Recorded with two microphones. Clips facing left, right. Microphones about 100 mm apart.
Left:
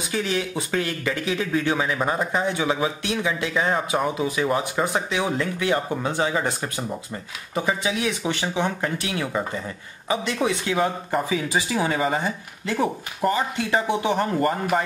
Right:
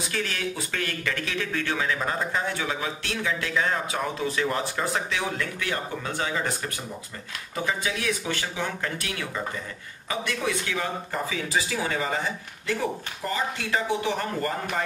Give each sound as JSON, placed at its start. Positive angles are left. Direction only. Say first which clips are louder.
{"t": 0.1, "sound": "a man's voice", "louder": "left 7 dB", "side_deg": 20}
{"t": 13.2, "sound": "speech", "louder": "left 8 dB", "side_deg": 55}
{"t": 13.6, "sound": "a man's voice", "louder": "left 4 dB", "side_deg": 20}